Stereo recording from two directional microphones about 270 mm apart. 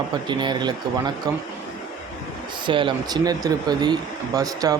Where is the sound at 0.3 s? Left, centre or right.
Centre.